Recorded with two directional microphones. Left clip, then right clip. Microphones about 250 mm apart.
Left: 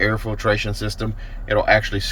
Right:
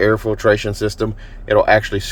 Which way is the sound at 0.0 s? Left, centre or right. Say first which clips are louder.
Right 6 dB; right.